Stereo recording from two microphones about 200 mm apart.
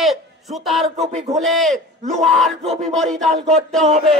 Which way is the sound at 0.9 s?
35° right (ahead or behind).